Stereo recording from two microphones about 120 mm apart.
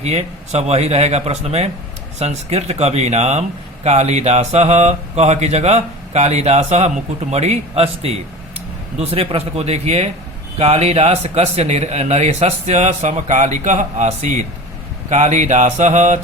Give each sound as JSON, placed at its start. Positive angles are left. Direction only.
{"t": 0.0, "sound": "speech", "side_deg": -65}